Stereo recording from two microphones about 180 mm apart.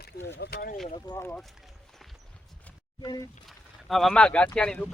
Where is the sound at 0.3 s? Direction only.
55° left (ahead or behind).